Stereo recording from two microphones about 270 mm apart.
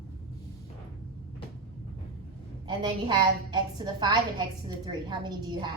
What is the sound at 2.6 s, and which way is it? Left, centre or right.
A woman's voice, centre.